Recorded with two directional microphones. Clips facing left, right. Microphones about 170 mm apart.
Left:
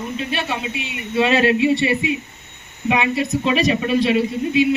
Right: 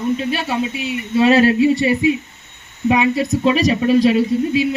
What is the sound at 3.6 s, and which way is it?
Speech, 40° right (ahead or behind).